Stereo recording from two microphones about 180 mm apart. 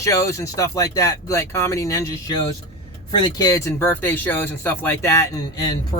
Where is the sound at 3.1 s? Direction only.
25° left (ahead or behind).